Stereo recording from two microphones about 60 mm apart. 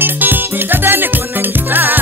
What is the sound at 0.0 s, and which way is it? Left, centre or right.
Music, right.